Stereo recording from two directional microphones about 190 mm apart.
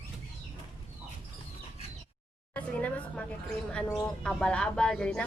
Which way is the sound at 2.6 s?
5° left (ahead or behind).